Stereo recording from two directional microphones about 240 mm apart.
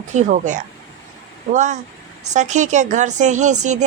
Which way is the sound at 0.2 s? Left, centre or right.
Right.